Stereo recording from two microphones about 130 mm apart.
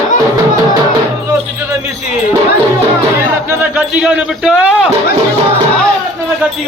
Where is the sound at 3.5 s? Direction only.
10° right (ahead or behind).